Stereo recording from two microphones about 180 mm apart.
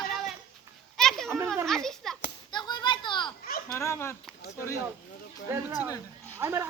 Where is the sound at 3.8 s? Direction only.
15° left (ahead or behind).